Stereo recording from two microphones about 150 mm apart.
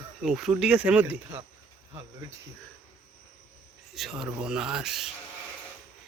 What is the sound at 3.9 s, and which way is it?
Speech, centre (ahead or behind).